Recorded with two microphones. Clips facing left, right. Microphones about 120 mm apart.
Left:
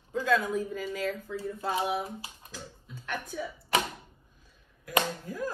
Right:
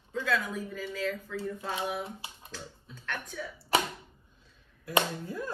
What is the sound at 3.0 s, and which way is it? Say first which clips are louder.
Speech: left 2 dB; 10° left (ahead or behind).